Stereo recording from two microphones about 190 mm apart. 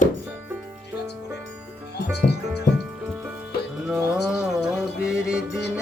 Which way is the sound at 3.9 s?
Centre (ahead or behind).